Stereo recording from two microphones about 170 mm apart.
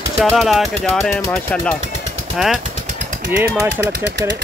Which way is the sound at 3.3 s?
15° right (ahead or behind).